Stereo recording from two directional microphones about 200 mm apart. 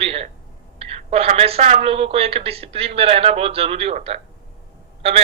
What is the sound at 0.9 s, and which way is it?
Speech, 30° right (ahead or behind).